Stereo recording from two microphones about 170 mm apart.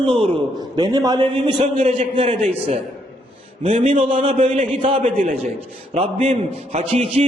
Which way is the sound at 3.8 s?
30° right (ahead or behind).